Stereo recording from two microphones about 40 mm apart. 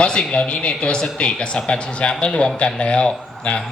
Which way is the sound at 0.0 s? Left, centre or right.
Left.